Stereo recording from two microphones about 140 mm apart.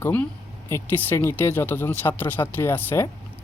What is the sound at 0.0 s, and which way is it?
Speech, 15° left (ahead or behind).